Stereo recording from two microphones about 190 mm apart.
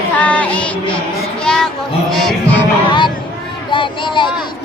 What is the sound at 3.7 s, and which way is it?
Speech, 25° left (ahead or behind).